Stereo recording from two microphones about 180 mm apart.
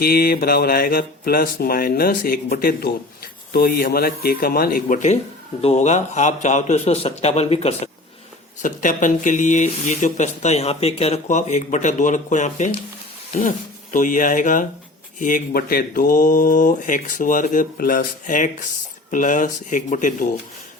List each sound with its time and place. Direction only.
0.0 s a man's voice: 60° left (ahead or behind); by 7.8 s 35° left (ahead or behind)
8.6 s speech: 45° left (ahead or behind)
13.9 s speech: 45° left (ahead or behind)